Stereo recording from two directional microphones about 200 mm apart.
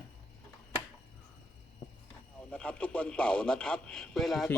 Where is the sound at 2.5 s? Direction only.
5° left (ahead or behind).